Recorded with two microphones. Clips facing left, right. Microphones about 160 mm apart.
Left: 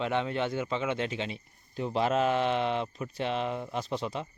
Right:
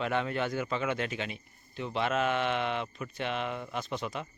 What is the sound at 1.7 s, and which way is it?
Speech, 40° left (ahead or behind).